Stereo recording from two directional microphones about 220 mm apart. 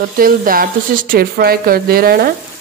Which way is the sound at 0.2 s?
40° right (ahead or behind).